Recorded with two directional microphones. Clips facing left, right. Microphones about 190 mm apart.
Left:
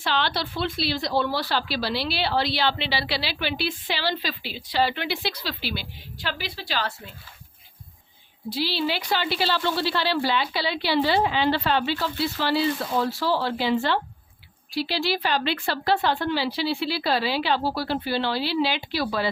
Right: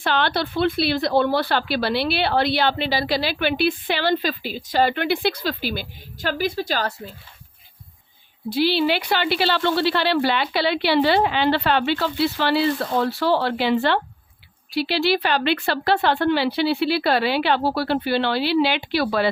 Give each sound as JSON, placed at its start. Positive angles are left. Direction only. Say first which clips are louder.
{"t": 0.0, "sound": "speech", "louder": "right 4 dB", "side_deg": -55}
{"t": 8.4, "sound": "speech", "louder": "right 7 dB", "side_deg": -55}